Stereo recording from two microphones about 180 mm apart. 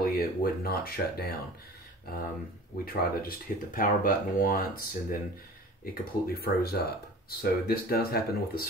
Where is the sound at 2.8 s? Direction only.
55° left (ahead or behind).